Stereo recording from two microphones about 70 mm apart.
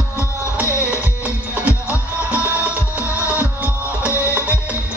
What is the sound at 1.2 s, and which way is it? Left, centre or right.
Music, right.